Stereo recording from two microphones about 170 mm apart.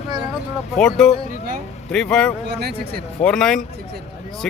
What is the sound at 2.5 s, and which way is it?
Speech, 70° right (ahead or behind).